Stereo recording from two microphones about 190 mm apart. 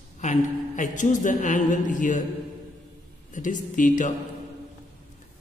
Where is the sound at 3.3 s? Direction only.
45° left (ahead or behind).